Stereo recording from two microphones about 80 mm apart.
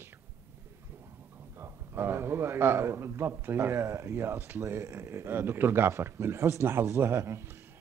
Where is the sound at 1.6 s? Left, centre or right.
Right.